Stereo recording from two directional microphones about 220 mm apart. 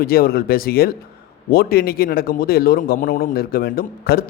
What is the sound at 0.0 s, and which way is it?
Speech, 45° left (ahead or behind).